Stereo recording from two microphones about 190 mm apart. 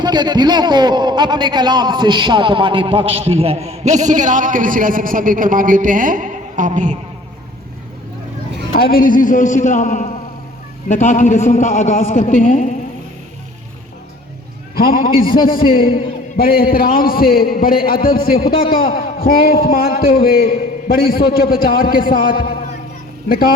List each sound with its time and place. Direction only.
0.0 s a man's voice: 20° right (ahead or behind); by 7.0 s 40° right (ahead or behind)
8.7 s a man's voice: 50° left (ahead or behind)
14.8 s a man's voice: 50° left (ahead or behind)